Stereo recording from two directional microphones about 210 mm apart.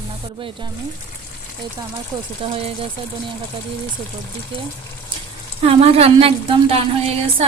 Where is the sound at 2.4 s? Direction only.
25° right (ahead or behind).